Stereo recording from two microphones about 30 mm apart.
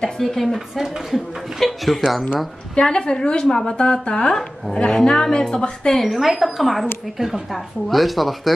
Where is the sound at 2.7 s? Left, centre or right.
Left.